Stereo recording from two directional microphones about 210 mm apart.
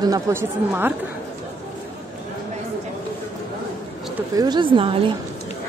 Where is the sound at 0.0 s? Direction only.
15° right (ahead or behind).